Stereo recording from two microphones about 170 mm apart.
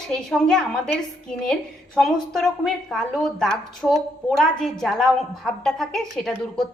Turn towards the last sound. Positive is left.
turn(degrees=0)  # may be behind; listen again after turning